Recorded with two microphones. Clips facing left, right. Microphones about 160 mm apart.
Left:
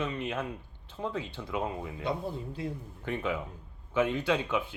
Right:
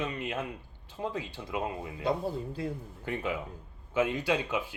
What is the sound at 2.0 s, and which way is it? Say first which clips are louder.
Speech: right 4 dB; 35° right (ahead or behind).